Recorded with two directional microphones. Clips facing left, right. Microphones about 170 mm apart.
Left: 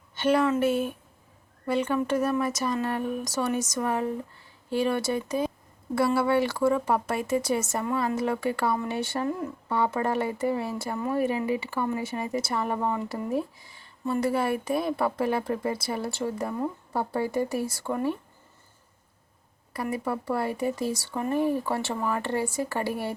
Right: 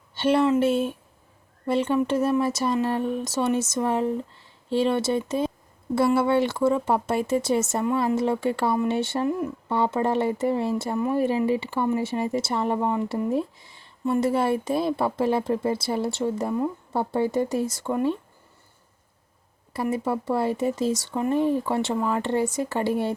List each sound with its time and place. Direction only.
0.1 s speech: 30° right (ahead or behind)
19.7 s speech: 25° right (ahead or behind)